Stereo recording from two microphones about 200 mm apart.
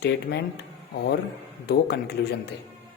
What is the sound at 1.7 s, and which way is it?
Speech, 55° left (ahead or behind).